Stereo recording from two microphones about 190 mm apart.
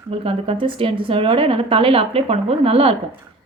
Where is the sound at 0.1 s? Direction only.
30° right (ahead or behind).